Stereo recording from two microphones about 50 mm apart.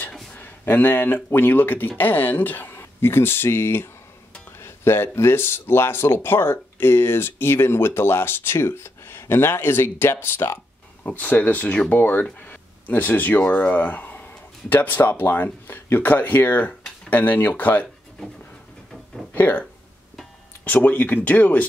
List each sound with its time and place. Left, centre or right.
0.7 s speech: left
11.2 s speech: left
19.3 s speech: left
20.6 s speech: left